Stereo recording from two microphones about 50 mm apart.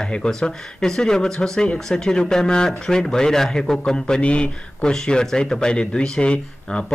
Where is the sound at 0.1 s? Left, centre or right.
Centre.